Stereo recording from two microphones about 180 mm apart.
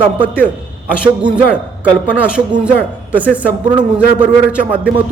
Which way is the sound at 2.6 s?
10° right (ahead or behind).